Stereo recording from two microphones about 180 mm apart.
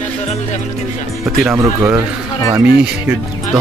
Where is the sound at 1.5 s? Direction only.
10° right (ahead or behind).